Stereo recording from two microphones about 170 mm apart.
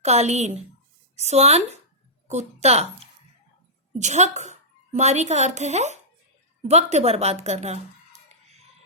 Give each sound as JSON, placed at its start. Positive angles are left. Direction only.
{"t": 0.0, "sound": "a woman's voice", "side_deg": -40}
{"t": 3.9, "sound": "a woman's voice", "side_deg": -45}